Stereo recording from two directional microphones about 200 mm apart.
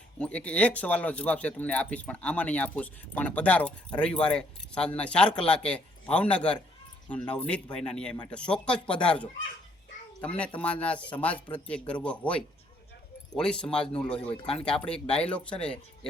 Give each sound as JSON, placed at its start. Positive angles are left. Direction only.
{"t": 0.2, "sound": "a man's voice", "side_deg": 5}
{"t": 14.3, "sound": "speech", "side_deg": 30}
{"t": 14.6, "sound": "a man's voice", "side_deg": 5}